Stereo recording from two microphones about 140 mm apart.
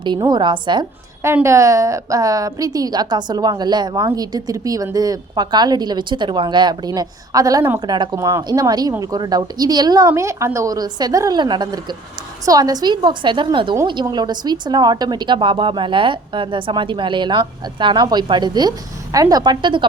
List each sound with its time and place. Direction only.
0.0 s a woman's voice: 30° right (ahead or behind)
1.2 s a woman's voice: 20° right (ahead or behind); by 19.9 s 35° right (ahead or behind)